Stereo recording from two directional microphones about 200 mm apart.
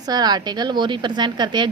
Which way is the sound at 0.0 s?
20° right (ahead or behind).